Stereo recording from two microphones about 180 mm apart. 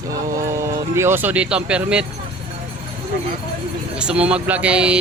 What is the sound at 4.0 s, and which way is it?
Speech, 5° right (ahead or behind).